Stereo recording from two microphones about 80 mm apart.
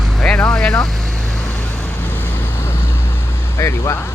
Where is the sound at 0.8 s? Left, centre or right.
Centre.